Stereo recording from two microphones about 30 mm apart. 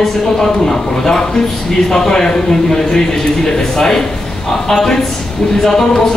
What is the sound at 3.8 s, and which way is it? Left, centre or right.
Speech, centre.